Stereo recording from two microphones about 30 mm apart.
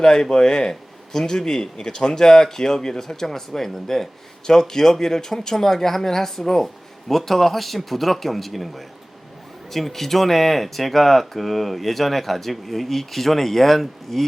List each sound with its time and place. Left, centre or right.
0.0 s speech: left